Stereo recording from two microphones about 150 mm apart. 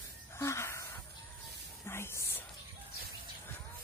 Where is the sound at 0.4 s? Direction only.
20° left (ahead or behind).